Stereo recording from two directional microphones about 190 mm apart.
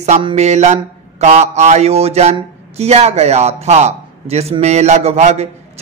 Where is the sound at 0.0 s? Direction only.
30° right (ahead or behind).